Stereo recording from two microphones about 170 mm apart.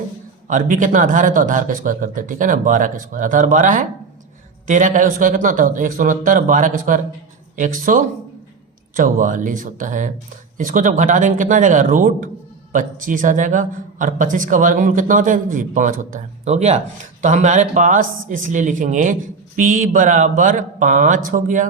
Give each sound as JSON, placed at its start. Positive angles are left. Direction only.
{"t": 0.4, "sound": "speech", "side_deg": -50}